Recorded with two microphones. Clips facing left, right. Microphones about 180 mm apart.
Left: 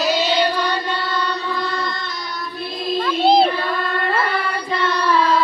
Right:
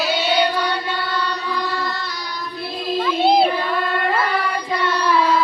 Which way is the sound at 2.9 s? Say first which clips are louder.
Left 1 dB; 5° right (ahead or behind).